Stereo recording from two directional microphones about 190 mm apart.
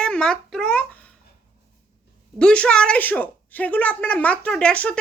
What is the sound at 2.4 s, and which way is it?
A woman's voice, 5° left (ahead or behind).